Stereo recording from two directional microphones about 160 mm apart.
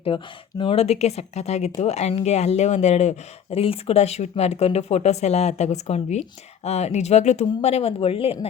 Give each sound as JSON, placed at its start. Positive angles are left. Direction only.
{"t": 0.1, "sound": "speech", "side_deg": 30}